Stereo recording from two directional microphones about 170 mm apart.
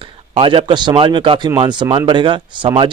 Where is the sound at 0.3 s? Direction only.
35° right (ahead or behind).